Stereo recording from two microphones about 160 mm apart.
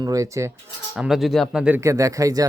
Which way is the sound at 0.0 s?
20° right (ahead or behind).